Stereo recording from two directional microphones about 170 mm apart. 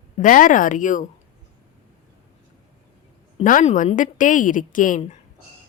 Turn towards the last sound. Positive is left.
turn(degrees=50)  # may be behind; listen again after turning